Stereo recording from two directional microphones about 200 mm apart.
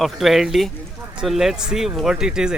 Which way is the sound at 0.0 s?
Centre (ahead or behind).